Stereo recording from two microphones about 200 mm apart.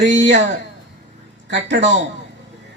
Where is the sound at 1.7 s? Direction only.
60° right (ahead or behind).